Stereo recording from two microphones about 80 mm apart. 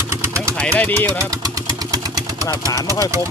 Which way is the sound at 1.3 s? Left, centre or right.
Right.